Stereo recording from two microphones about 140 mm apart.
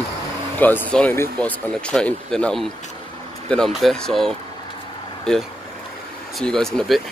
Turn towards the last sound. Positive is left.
turn(degrees=0)  # may be behind; listen again after turning